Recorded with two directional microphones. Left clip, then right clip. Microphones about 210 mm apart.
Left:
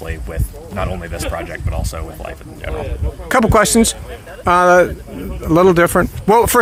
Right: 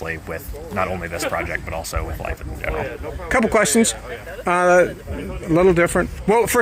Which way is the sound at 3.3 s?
15° left (ahead or behind).